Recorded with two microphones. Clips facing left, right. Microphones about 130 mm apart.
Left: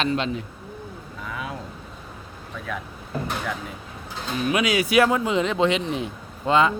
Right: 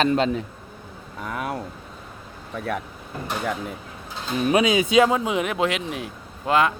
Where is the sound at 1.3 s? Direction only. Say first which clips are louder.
Right 4 dB; 50° right (ahead or behind).